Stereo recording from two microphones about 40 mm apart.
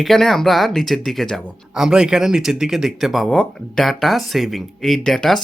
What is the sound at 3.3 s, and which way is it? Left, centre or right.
Speech, centre.